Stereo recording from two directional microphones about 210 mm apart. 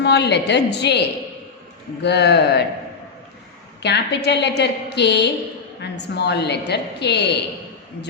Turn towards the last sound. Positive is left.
turn(degrees=55)  # may be behind; listen again after turning